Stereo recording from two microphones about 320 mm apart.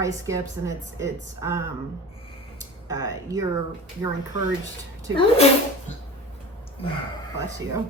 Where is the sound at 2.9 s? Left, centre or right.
Centre.